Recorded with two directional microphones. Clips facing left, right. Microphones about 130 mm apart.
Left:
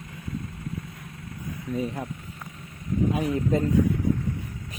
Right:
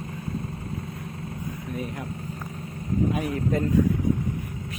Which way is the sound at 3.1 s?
25° left (ahead or behind).